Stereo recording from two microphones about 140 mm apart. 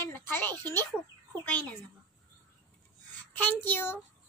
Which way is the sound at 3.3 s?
15° left (ahead or behind).